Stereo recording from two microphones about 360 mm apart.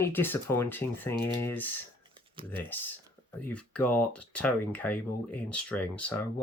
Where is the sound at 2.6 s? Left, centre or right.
Centre.